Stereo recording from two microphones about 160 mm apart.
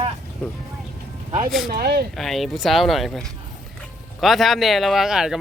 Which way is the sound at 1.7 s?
80° right.